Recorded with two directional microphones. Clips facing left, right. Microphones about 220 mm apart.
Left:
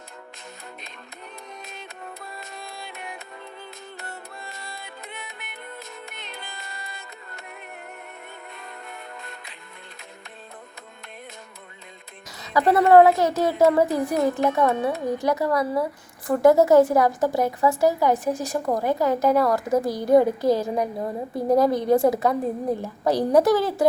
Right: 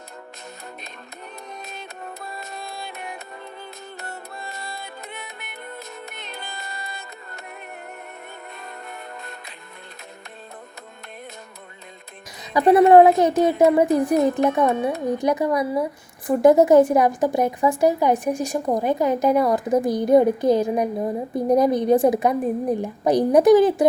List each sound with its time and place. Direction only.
1.5 s music: 40° right (ahead or behind)
8.5 s music: 40° right (ahead or behind)
12.4 s speech: 15° right (ahead or behind)